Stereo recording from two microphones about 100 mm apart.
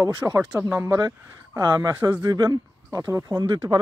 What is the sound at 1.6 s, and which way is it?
Speech, 45° right (ahead or behind).